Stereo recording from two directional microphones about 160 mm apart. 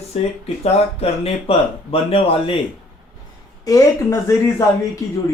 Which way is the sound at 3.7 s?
20° left (ahead or behind).